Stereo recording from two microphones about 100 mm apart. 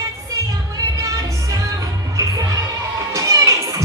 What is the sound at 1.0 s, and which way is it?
Music, 35° right (ahead or behind).